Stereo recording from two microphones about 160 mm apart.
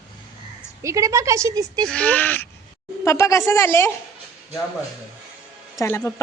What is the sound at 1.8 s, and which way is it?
A woman's voice, 10° left (ahead or behind).